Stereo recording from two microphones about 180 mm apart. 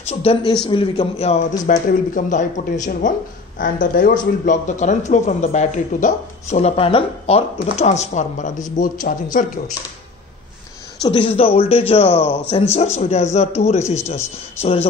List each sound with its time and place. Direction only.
0.1 s speech: 35° left (ahead or behind)
1.6 s speech: 45° left (ahead or behind)
11.0 s speech: 30° left (ahead or behind)